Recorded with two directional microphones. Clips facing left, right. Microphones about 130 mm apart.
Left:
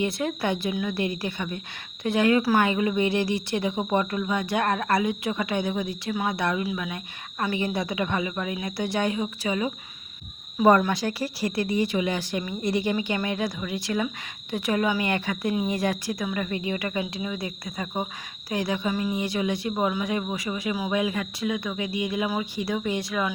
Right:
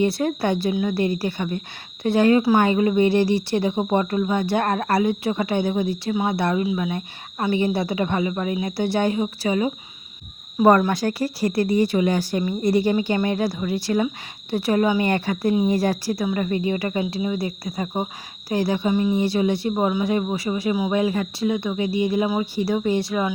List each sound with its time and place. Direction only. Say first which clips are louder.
0.0 s a woman's voice: right 5 dB; 35° right (ahead or behind)
2.6 s speech: right 6 dB; 35° right (ahead or behind)
10.6 s speech: right 3 dB; 45° right (ahead or behind); by 23.3 s 30° right (ahead or behind)